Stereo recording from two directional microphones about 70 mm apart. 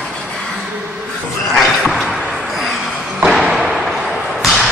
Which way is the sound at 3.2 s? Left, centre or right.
Centre.